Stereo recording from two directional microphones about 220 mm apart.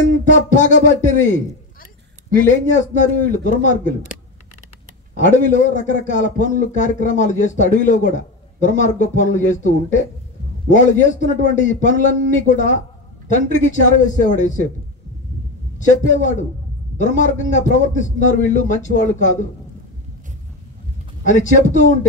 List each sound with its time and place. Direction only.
0.3 s a man's voice: 35° left (ahead or behind)
2.9 s a man's voice: 35° left (ahead or behind)
5.2 s a man's voice: 35° left (ahead or behind)
15.9 s a man's voice: 35° left (ahead or behind)
21.2 s a man's voice: 35° left (ahead or behind)